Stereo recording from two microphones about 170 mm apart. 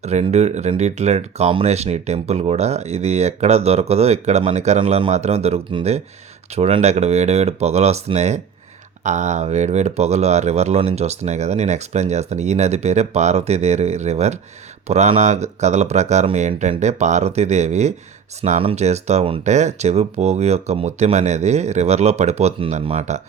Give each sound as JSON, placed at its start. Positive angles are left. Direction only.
{"t": 0.0, "sound": "speech", "side_deg": -40}